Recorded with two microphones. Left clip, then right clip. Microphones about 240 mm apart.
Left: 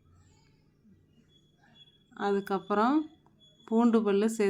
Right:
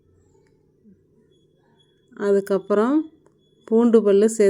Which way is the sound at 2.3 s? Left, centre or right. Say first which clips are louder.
Right 11 dB; centre.